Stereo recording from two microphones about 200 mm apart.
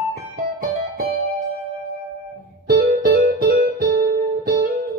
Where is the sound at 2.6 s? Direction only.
50° right (ahead or behind).